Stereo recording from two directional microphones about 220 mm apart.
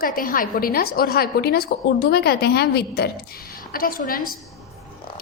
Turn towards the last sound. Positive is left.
turn(degrees=40)  # may be behind; listen again after turning